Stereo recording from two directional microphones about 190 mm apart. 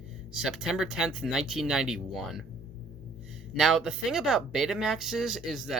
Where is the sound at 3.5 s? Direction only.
5° right (ahead or behind).